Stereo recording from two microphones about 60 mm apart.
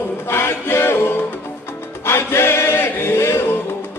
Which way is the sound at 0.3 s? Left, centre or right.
Left.